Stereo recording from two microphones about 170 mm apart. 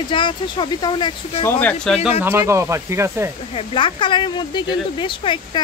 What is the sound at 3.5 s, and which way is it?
Speech, 30° left (ahead or behind).